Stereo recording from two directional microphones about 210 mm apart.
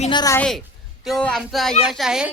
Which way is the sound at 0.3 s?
5° left (ahead or behind).